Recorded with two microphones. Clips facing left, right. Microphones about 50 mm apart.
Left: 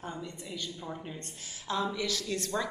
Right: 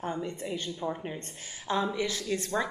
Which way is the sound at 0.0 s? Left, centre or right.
Right.